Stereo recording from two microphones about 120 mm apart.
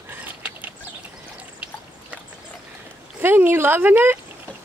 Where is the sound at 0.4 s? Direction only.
15° right (ahead or behind).